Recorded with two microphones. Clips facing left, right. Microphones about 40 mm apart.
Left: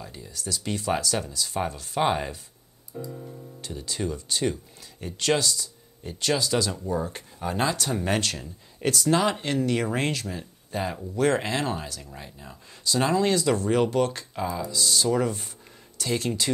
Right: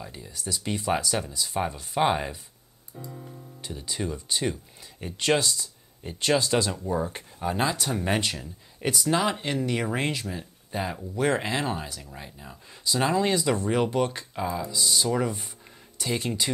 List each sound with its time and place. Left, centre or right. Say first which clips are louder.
0.0 s speech: even; centre
6.8 s speech: even; centre